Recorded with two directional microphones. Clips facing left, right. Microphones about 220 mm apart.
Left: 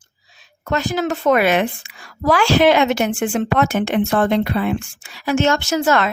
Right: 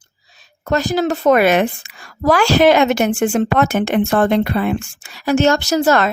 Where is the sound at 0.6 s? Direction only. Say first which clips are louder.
Right 3 dB; 40° right (ahead or behind).